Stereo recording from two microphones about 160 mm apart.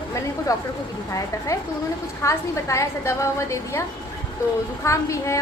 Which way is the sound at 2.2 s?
20° left (ahead or behind).